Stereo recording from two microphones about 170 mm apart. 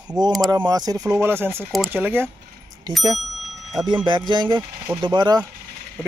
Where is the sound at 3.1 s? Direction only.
Centre (ahead or behind).